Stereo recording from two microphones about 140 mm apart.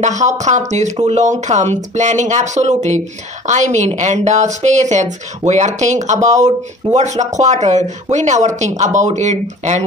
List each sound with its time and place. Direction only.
0.0 s speech: 60° right (ahead or behind)